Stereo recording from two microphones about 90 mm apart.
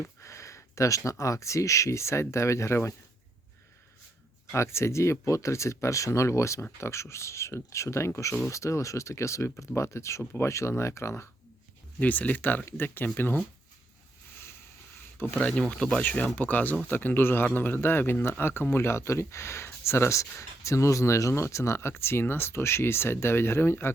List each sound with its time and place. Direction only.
0.2 s a sound: 35° left (ahead or behind)
1.2 s speech: 35° left (ahead or behind)
4.5 s speech: 30° left (ahead or behind)
11.9 s a man's voice: 15° left (ahead or behind)
15.4 s a man's voice: 10° left (ahead or behind); by 23.9 s 25° left (ahead or behind)